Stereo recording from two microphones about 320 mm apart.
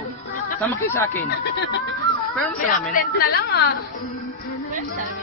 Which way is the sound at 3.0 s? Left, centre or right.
Left.